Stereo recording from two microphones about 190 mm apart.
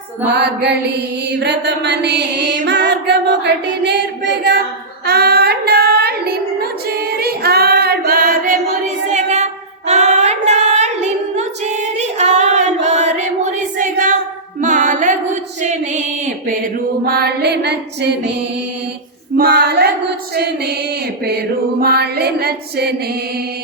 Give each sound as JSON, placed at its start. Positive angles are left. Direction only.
{"t": 0.3, "sound": "music", "side_deg": -60}
{"t": 5.0, "sound": "female singing", "side_deg": -55}
{"t": 9.1, "sound": "child singing", "side_deg": -35}
{"t": 14.6, "sound": "music", "side_deg": -40}
{"t": 17.1, "sound": "music", "side_deg": -55}
{"t": 19.4, "sound": "female singing", "side_deg": -55}
{"t": 21.2, "sound": "music", "side_deg": -55}